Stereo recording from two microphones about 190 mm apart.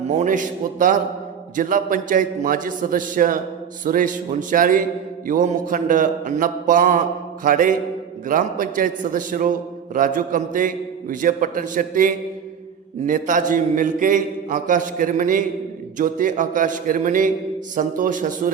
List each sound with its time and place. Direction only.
0.1 s a man's voice: 40° right (ahead or behind)